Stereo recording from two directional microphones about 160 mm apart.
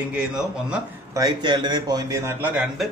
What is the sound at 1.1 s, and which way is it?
A man's voice, 25° right (ahead or behind).